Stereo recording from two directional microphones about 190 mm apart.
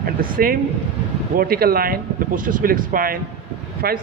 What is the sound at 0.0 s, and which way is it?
A man's voice, 50° right (ahead or behind).